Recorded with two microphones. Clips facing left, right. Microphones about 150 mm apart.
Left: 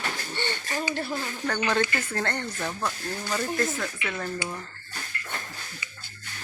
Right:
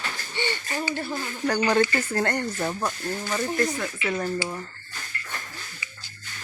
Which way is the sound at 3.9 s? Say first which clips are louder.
Right 5 dB; 25° right (ahead or behind).